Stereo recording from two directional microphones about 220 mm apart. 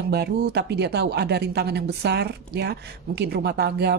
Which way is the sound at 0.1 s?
50° right (ahead or behind).